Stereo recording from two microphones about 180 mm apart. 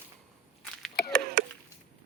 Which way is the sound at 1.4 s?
60° right (ahead or behind).